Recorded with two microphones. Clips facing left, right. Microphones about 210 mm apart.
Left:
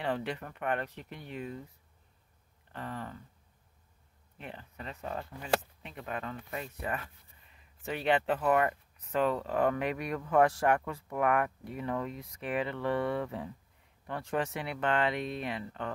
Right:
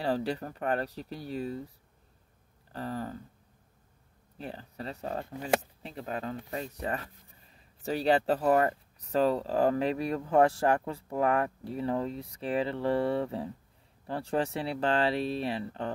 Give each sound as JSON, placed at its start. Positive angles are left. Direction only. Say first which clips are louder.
{"t": 0.0, "sound": "speech", "louder": "right 4 dB", "side_deg": -35}
{"t": 2.7, "sound": "speech", "louder": "right 5 dB", "side_deg": -35}
{"t": 4.4, "sound": "speech", "louder": "right 5 dB", "side_deg": -35}